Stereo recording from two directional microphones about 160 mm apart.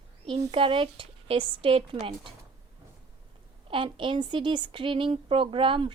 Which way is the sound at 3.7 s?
30° right (ahead or behind).